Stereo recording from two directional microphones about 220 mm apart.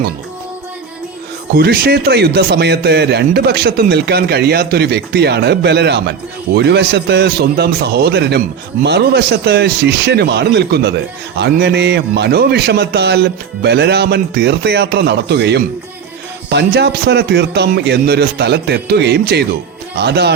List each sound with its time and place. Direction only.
1.5 s a man's voice: 45° right (ahead or behind)